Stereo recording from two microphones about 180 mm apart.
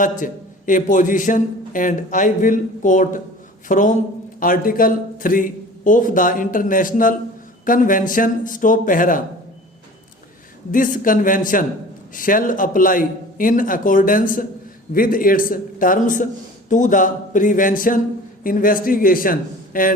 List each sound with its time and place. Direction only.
0.0 s a man's voice: 45° left (ahead or behind)
10.7 s a man's voice: 45° left (ahead or behind)